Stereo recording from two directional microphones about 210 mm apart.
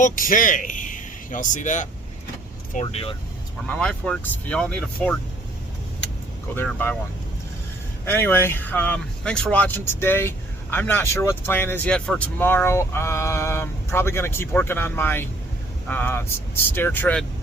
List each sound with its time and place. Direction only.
0.0 s speech: 40° left (ahead or behind)
2.8 s speech: 25° left (ahead or behind)
3.7 s speech: 5° left (ahead or behind)
6.6 s speech: 10° left (ahead or behind)
8.0 s speech: 10° left (ahead or behind)